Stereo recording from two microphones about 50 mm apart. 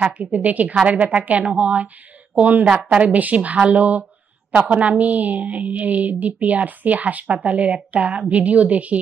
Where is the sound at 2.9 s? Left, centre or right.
Right.